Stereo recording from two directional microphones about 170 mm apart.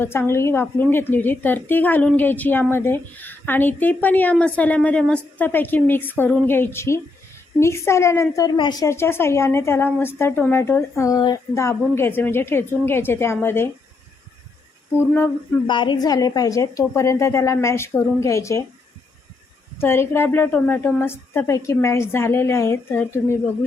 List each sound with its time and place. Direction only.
0.0 s a woman's voice: 15° left (ahead or behind)
8.9 s a woman's voice: 15° left (ahead or behind)
15.6 s a woman's voice: 30° left (ahead or behind)
19.8 s a woman's voice: 15° left (ahead or behind)